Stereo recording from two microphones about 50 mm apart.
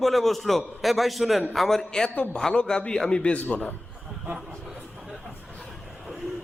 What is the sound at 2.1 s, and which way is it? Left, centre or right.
Speech, left.